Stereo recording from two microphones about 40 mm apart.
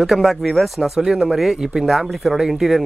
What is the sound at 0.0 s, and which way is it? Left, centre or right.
Speech, centre.